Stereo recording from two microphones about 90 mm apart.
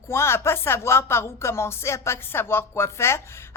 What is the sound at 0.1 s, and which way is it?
Speech, 30° left (ahead or behind).